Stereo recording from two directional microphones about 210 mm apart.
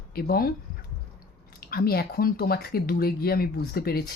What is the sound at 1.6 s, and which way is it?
Speech, 45° left (ahead or behind).